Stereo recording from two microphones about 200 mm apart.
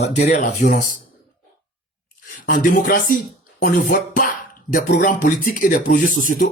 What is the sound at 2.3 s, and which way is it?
Speech, 45° left (ahead or behind).